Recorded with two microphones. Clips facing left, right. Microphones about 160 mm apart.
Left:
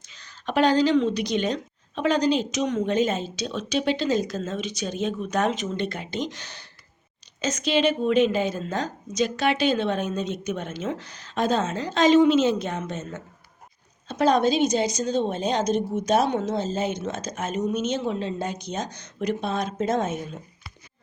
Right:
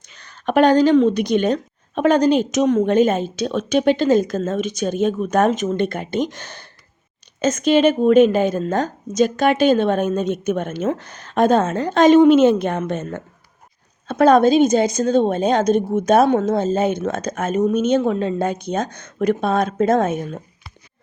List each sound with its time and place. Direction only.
0.1 s speech: 55° right (ahead or behind)